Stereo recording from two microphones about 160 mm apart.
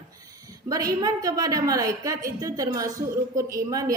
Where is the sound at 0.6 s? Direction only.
20° right (ahead or behind).